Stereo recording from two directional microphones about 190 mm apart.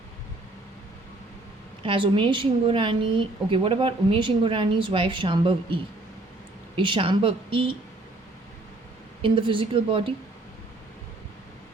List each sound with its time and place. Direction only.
1.8 s a woman's voice: 25° right (ahead or behind)
9.2 s a woman's voice: 25° right (ahead or behind)